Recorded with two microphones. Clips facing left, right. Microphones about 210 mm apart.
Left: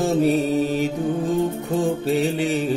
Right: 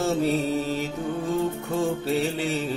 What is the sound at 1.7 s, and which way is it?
Music, 15° left (ahead or behind).